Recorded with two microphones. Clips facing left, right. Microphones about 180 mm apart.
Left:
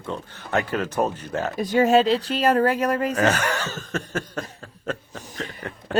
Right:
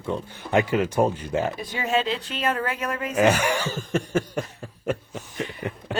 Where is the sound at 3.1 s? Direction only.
10° right (ahead or behind).